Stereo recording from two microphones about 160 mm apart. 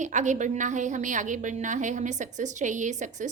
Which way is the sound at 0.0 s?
50° right (ahead or behind).